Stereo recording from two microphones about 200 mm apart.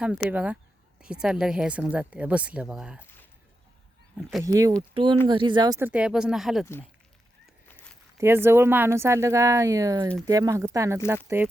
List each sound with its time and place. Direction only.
0.0 s speech: 5° right (ahead or behind)
4.2 s speech: centre (ahead or behind)
4.4 s a woman's voice: 15° right (ahead or behind)
5.9 s speech: 5° right (ahead or behind)
8.2 s a woman's voice: 10° right (ahead or behind)